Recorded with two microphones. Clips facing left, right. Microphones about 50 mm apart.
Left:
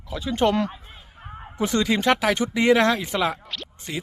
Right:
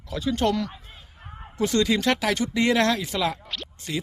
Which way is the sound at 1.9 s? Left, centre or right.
Left.